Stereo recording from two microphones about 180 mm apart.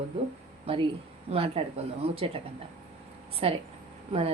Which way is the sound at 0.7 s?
35° right (ahead or behind).